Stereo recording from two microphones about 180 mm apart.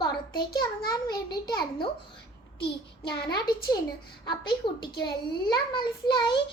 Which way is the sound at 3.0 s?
65° left (ahead or behind).